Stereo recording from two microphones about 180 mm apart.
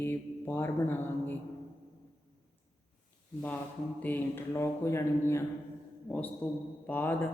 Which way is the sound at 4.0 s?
10° left (ahead or behind).